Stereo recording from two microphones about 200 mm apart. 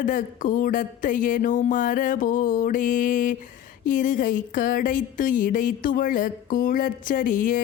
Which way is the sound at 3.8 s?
40° left (ahead or behind).